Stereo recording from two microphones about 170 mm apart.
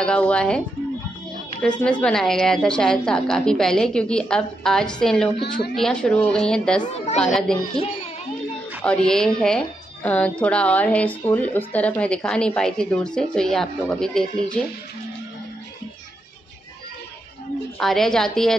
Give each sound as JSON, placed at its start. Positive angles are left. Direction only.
{"t": 0.0, "sound": "a woman's voice", "side_deg": 5}
{"t": 1.8, "sound": "a woman's voice", "side_deg": 5}
{"t": 6.8, "sound": "a woman's voice", "side_deg": 40}
{"t": 7.2, "sound": "a woman's voice", "side_deg": 5}
{"t": 8.5, "sound": "a woman's voice", "side_deg": 5}
{"t": 17.7, "sound": "a woman's voice", "side_deg": 0}